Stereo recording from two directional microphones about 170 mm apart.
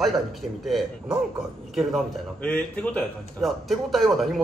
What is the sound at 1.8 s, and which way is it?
Speech, centre (ahead or behind).